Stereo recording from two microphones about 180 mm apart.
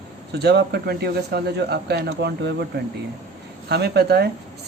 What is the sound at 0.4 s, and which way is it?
Speech, 65° right (ahead or behind).